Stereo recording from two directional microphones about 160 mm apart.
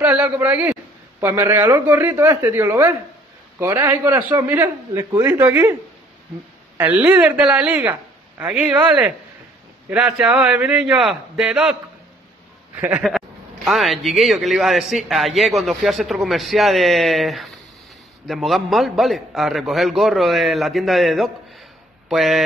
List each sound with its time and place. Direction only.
0.0 s a man's voice: 10° right (ahead or behind)
6.8 s a man's voice: 10° right (ahead or behind)
12.7 s a man's voice: 10° right (ahead or behind)